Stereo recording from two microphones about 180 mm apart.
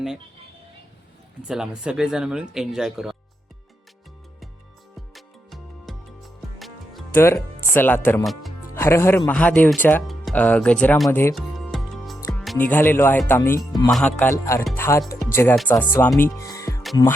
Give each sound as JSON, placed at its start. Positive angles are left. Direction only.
{"t": 1.4, "sound": "speech", "side_deg": -5}
{"t": 5.1, "sound": "music", "side_deg": 0}
{"t": 7.1, "sound": "speech", "side_deg": 15}
{"t": 8.2, "sound": "speech", "side_deg": 0}
{"t": 8.7, "sound": "speech", "side_deg": 15}
{"t": 11.3, "sound": "music", "side_deg": 0}
{"t": 12.3, "sound": "speech", "side_deg": 5}